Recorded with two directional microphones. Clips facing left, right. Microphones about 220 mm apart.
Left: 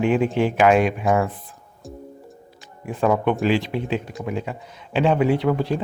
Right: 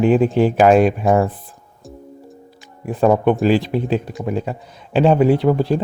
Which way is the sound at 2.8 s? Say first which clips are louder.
Right 5 dB; 40° right (ahead or behind).